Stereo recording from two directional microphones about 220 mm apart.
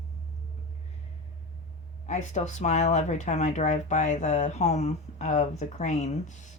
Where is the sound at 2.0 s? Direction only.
30° left (ahead or behind).